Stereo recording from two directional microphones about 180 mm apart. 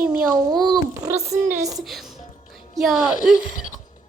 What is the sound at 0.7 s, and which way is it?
A woman's voice, 20° right (ahead or behind).